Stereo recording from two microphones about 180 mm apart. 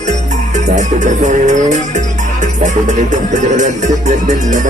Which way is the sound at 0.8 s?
45° right (ahead or behind).